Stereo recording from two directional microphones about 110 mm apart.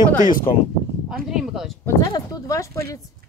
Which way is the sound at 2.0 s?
30° left (ahead or behind).